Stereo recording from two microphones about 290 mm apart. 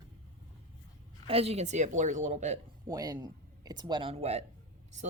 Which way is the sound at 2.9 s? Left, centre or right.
Centre.